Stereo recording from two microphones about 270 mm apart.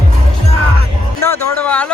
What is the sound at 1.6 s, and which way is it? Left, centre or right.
Speech, centre.